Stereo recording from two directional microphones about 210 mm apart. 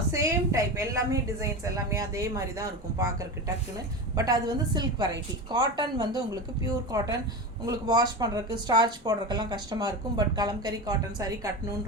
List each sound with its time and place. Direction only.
0.1 s a woman's voice: 15° right (ahead or behind)